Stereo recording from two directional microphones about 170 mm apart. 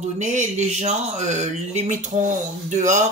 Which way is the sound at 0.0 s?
45° right (ahead or behind).